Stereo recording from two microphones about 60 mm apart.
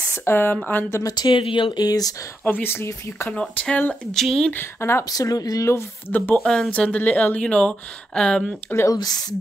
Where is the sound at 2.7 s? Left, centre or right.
Left.